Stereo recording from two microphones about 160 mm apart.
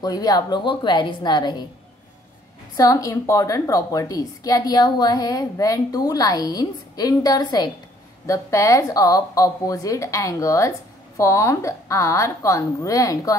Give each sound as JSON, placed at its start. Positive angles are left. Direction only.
{"t": 0.0, "sound": "a woman's voice", "side_deg": 25}
{"t": 2.8, "sound": "a woman's voice", "side_deg": 20}